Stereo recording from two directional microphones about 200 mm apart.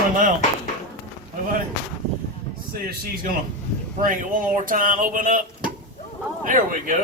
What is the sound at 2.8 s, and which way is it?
Speech, 45° right (ahead or behind).